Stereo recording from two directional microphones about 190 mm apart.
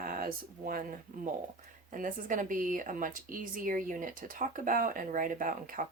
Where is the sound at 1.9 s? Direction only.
45° right (ahead or behind).